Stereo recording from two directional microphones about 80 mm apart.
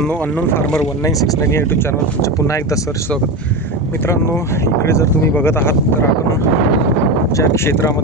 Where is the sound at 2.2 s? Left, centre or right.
Left.